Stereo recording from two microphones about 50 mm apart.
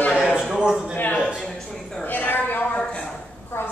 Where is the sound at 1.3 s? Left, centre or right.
Centre.